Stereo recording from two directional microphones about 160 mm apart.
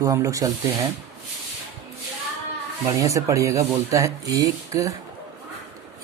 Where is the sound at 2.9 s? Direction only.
20° right (ahead or behind).